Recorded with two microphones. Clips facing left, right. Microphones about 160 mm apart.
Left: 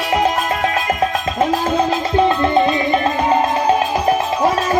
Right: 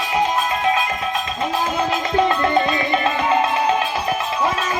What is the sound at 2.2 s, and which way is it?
Music, 25° left (ahead or behind).